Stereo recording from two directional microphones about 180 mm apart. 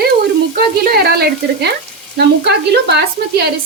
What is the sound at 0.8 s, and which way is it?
Sizzle, 60° right (ahead or behind).